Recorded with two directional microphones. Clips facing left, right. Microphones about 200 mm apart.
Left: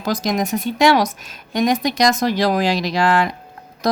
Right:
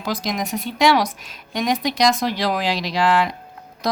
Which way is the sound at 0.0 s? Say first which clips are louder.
Left 4 dB; 45° left (ahead or behind).